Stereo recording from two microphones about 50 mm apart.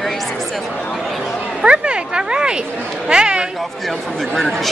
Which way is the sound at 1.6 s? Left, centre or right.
Centre.